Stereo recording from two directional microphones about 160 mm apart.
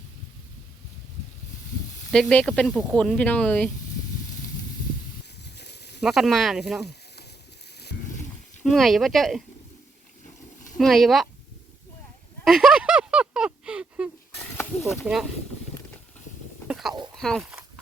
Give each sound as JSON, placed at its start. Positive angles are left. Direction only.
{"t": 2.0, "sound": "speech", "side_deg": 5}
{"t": 5.4, "sound": "snake", "side_deg": 90}
{"t": 6.0, "sound": "speech", "side_deg": 0}
{"t": 8.6, "sound": "speech", "side_deg": 0}
{"t": 10.8, "sound": "speech", "side_deg": 0}
{"t": 12.5, "sound": "a sound", "side_deg": -5}
{"t": 14.6, "sound": "a sound", "side_deg": 15}
{"t": 15.0, "sound": "speech", "side_deg": -5}
{"t": 16.6, "sound": "a sound", "side_deg": 0}
{"t": 17.2, "sound": "speech", "side_deg": 0}